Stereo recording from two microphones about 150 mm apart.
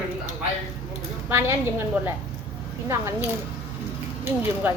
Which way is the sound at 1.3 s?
15° right (ahead or behind).